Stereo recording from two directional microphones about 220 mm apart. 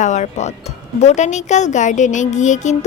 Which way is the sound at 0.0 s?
30° left (ahead or behind).